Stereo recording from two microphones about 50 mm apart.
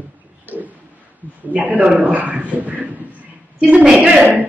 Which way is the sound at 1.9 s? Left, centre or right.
Right.